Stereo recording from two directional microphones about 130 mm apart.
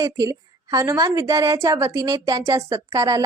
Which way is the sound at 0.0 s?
25° right (ahead or behind).